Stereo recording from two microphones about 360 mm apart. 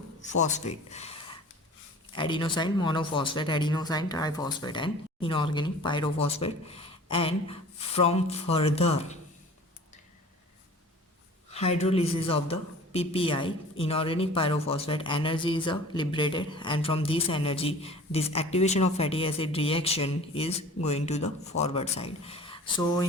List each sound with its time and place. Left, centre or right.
0.2 s speech: centre
11.5 s speech: centre